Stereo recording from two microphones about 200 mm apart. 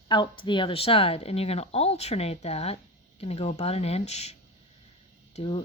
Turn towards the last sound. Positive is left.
turn(degrees=30)  # may be behind; listen again after turning